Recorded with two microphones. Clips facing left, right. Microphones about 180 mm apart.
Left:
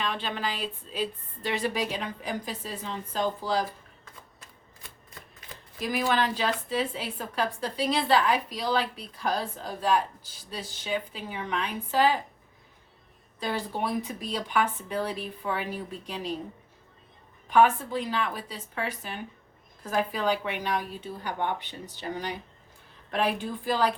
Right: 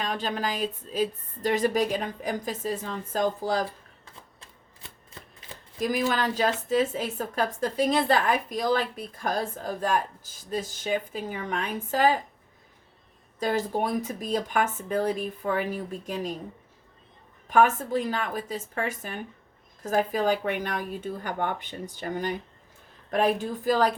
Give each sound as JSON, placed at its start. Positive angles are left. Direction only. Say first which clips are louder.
{"t": 0.0, "sound": "a woman's voice", "louder": "right 2 dB", "side_deg": -40}
{"t": 4.0, "sound": "typewriter", "louder": "right 1 dB", "side_deg": -25}
{"t": 5.8, "sound": "a woman's voice", "louder": "right 1 dB", "side_deg": -45}
{"t": 13.4, "sound": "a woman's voice", "louder": "right 4 dB", "side_deg": -45}
{"t": 17.5, "sound": "a woman's voice", "louder": "even", "side_deg": -45}